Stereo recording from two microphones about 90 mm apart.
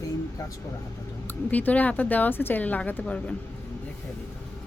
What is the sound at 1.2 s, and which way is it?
Speech, 20° left (ahead or behind).